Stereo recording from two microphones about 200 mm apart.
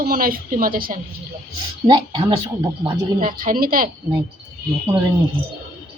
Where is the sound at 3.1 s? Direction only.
45° right (ahead or behind).